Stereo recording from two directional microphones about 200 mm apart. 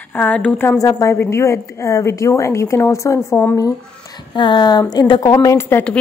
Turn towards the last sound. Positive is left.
turn(degrees=10)  # may be behind; listen again after turning